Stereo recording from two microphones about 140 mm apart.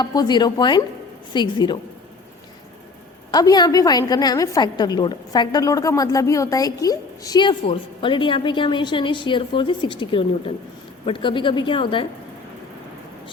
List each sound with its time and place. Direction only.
0.0 s a woman's voice: 30° left (ahead or behind)
3.3 s a woman's voice: 30° left (ahead or behind)